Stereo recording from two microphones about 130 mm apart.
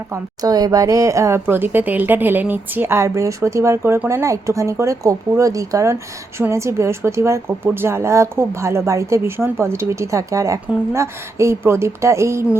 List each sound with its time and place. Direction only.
0.1 s a woman's voice: 30° right (ahead or behind)